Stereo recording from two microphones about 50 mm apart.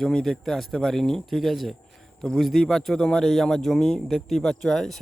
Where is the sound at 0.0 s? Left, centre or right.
Centre.